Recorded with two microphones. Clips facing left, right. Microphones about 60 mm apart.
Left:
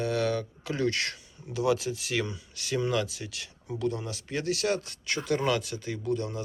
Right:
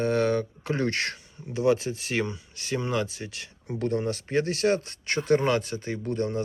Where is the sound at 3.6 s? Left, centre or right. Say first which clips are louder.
Right 4 dB; right.